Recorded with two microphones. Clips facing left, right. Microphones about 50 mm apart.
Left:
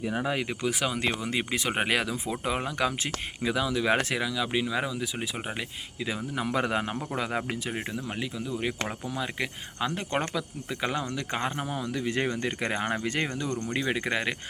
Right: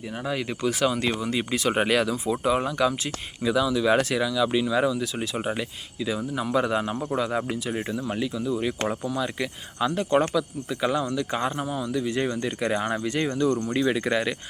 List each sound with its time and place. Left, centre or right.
0.0 s speech: centre
1.0 s speech: left
4.2 s speech: left
6.3 s speech: left
7.7 s speech: left
13.7 s speech: left